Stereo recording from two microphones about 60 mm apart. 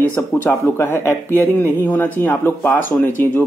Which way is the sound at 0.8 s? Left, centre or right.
Left.